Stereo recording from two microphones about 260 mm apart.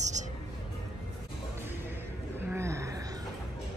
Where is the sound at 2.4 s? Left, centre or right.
Centre.